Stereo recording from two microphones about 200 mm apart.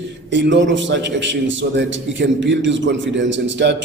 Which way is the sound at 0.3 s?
60° right (ahead or behind).